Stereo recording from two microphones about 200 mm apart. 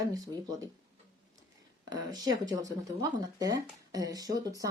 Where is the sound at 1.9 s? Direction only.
20° right (ahead or behind).